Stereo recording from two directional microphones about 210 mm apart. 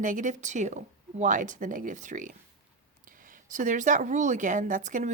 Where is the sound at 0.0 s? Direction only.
35° right (ahead or behind).